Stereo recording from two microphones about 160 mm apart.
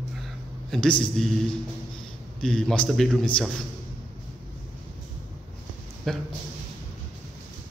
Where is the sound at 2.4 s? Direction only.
5° left (ahead or behind).